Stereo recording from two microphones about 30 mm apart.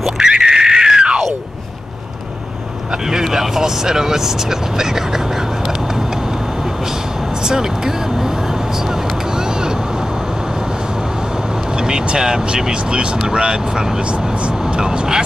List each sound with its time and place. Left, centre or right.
0.3 s a sound: right
2.9 s speech: centre
7.4 s vehicle: right
11.7 s vehicle: right
12.3 s speech: right
14.7 s vehicle: right